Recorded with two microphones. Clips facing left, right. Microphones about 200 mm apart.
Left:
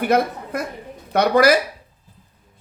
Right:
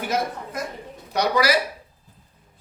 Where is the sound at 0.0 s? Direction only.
60° left (ahead or behind).